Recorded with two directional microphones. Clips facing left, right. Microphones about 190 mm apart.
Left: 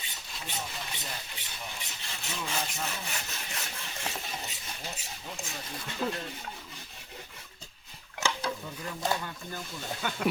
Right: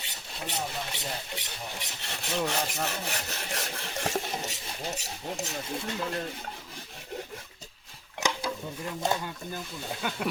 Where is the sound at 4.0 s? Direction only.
50° right (ahead or behind).